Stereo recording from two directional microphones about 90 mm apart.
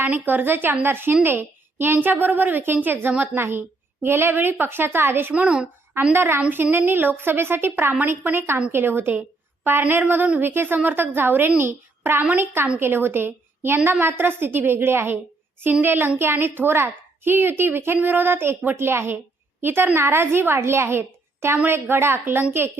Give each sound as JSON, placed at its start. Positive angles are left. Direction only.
{"t": 0.0, "sound": "a woman's voice", "side_deg": -20}
{"t": 5.3, "sound": "a woman's voice", "side_deg": -15}
{"t": 6.1, "sound": "a woman's voice", "side_deg": -25}